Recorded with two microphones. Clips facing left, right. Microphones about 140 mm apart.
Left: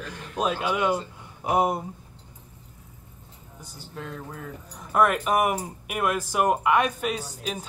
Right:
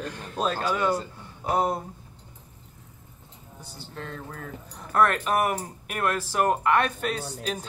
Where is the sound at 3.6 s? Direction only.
10° left (ahead or behind).